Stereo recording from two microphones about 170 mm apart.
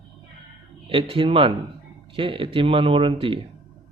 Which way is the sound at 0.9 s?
30° right (ahead or behind).